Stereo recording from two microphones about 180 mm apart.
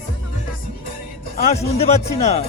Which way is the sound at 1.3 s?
40° left (ahead or behind).